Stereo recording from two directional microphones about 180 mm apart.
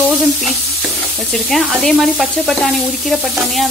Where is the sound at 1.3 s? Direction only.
Centre (ahead or behind).